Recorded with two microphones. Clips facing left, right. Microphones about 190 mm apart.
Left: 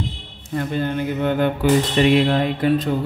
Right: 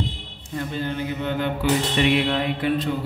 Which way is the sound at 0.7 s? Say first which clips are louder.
Left 5 dB; 55° left (ahead or behind).